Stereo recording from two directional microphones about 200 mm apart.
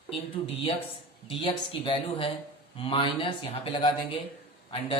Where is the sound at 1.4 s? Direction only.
25° left (ahead or behind).